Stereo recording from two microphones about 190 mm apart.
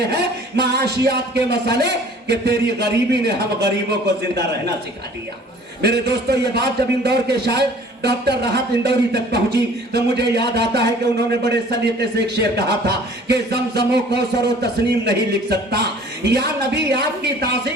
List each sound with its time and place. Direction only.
0.1 s a man's voice: 60° right (ahead or behind)
5.8 s a man's voice: 60° right (ahead or behind)
14.6 s a man's voice: 60° right (ahead or behind)